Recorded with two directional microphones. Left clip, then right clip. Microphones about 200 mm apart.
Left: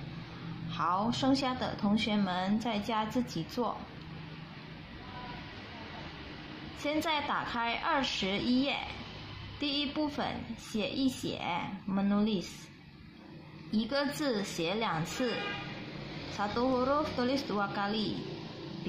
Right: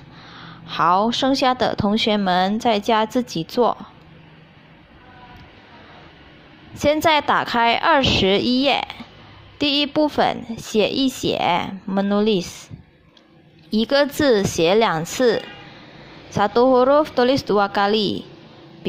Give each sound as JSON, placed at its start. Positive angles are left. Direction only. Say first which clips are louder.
{"t": 0.7, "sound": "speech", "louder": "right 14 dB", "side_deg": -45}
{"t": 6.8, "sound": "speech", "louder": "right 15 dB", "side_deg": -50}
{"t": 13.7, "sound": "speech", "louder": "right 15 dB", "side_deg": -45}
{"t": 16.3, "sound": "speech", "louder": "right 16 dB", "side_deg": -45}